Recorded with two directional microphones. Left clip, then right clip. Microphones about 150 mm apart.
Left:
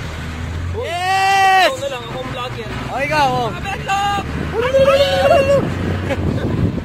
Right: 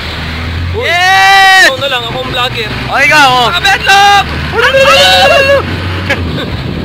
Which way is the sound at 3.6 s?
Centre (ahead or behind).